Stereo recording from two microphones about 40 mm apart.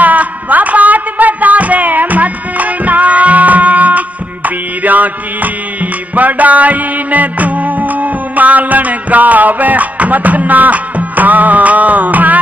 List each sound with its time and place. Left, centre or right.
0.0 s music: right